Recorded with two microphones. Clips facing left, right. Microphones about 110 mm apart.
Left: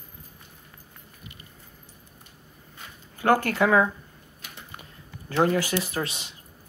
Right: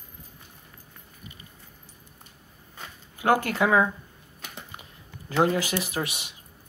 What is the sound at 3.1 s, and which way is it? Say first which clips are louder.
Speech: left 1 dB; 15° right (ahead or behind).